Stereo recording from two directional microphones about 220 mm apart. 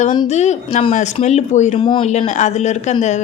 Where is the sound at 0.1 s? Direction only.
25° left (ahead or behind).